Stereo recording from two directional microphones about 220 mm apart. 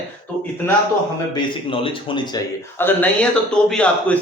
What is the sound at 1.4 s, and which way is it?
Speech, 25° left (ahead or behind).